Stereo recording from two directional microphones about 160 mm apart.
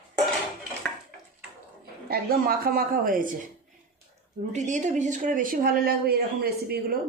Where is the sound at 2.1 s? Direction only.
70° right (ahead or behind).